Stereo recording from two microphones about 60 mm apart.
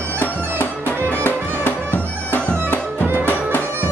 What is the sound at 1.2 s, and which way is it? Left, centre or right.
Music, left.